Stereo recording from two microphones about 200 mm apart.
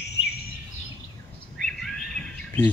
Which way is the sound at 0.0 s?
55° left (ahead or behind).